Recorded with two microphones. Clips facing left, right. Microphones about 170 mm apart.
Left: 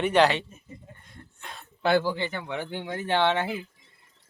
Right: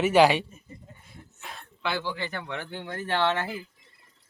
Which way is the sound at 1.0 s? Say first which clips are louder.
Even; 5° right (ahead or behind).